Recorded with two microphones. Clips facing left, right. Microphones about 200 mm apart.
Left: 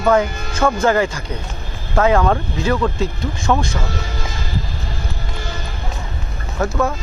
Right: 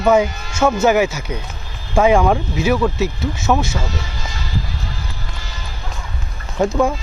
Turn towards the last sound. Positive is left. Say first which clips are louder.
# right 3 dB
turn(degrees=-15)  # may be behind; listen again after turning